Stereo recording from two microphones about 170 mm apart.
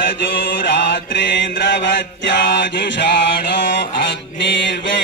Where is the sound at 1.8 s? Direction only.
90° left.